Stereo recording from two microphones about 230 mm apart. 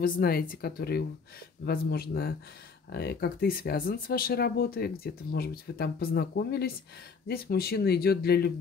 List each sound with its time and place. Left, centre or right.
0.0 s speech: left